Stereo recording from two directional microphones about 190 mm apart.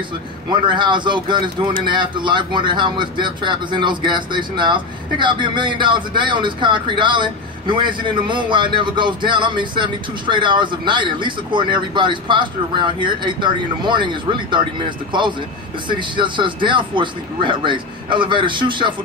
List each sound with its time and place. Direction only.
0.5 s a man's voice: 25° right (ahead or behind)
15.9 s a man's voice: 25° right (ahead or behind)